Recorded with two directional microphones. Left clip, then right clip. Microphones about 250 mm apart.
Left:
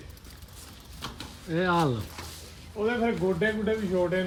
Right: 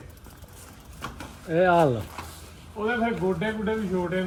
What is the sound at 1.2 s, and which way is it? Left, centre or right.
Speech, centre.